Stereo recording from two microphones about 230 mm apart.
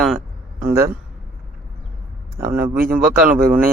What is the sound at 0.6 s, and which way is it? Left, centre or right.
Speech, centre.